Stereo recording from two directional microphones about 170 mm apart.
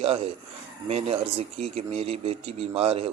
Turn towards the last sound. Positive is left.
turn(degrees=-35)  # may be behind; listen again after turning